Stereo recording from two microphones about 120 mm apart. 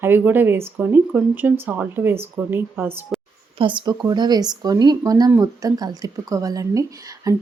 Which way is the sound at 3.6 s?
40° right (ahead or behind).